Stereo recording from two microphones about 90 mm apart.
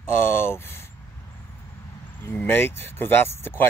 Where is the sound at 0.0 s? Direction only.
25° left (ahead or behind).